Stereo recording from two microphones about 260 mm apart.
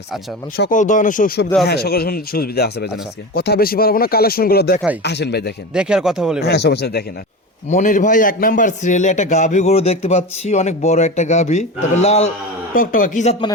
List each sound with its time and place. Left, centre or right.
0.5 s speech: left
5.7 s speech: centre
6.4 s a man's voice: left